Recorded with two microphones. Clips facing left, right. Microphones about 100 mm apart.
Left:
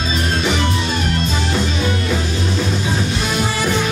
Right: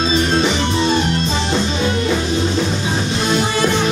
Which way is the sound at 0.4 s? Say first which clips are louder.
Right 3 dB; 25° right (ahead or behind).